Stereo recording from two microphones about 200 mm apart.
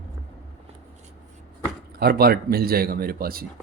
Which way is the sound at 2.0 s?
50° right (ahead or behind).